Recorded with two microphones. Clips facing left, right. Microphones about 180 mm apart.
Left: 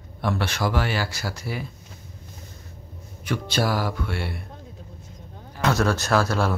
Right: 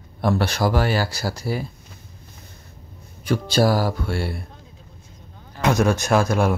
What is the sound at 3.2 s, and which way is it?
Speech, 35° right (ahead or behind).